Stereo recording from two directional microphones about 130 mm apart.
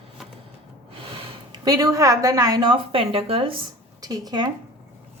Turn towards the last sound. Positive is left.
turn(degrees=-30)  # may be behind; listen again after turning